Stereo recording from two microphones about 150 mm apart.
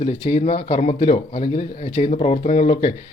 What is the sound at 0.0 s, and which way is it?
Speech, 40° left (ahead or behind).